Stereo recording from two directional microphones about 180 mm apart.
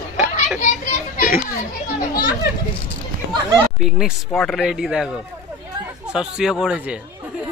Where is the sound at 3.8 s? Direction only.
Centre (ahead or behind).